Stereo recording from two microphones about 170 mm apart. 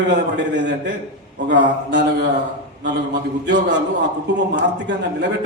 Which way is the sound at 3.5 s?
90° right.